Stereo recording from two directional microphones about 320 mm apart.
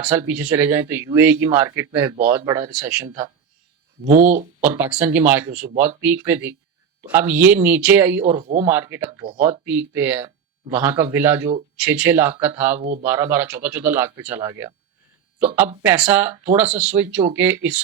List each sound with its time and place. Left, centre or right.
0.0 s speech: centre
4.0 s speech: right
4.7 s speech: centre
8.2 s speech: centre
8.7 s speech: centre